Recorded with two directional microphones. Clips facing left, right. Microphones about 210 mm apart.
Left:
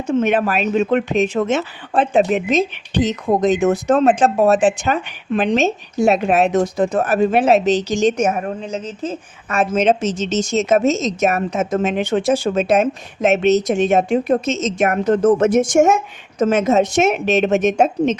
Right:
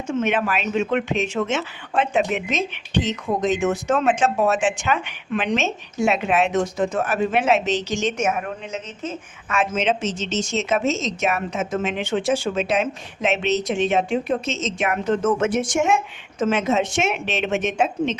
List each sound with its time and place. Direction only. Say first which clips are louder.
0.1 s speech: left 5 dB; 35° left (ahead or behind)